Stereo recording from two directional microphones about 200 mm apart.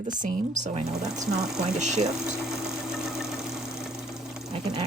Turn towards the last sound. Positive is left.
turn(degrees=0)  # may be behind; listen again after turning